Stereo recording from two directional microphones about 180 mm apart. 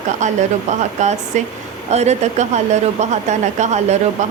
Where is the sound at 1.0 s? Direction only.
40° right (ahead or behind).